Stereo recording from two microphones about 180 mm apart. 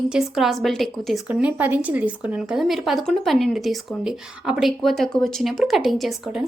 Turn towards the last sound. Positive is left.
turn(degrees=0)  # may be behind; listen again after turning